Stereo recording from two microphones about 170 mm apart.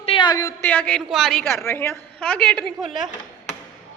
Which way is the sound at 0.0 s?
30° left (ahead or behind).